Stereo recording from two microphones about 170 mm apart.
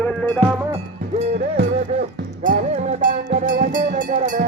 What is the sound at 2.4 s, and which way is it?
Music, 50° right (ahead or behind).